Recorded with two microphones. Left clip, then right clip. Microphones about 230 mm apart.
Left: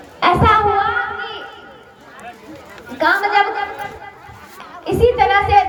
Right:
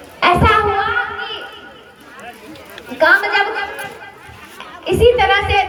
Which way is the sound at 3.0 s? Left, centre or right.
Left.